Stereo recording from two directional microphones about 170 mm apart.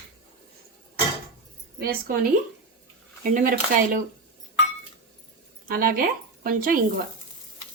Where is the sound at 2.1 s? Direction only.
55° right (ahead or behind).